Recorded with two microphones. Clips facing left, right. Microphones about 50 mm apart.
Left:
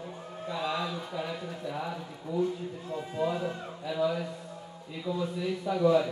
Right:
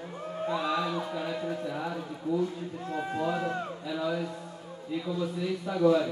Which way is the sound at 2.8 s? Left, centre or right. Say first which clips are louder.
Right 1 dB; right.